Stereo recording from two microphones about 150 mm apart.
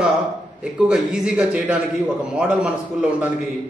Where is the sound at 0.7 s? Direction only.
5° right (ahead or behind).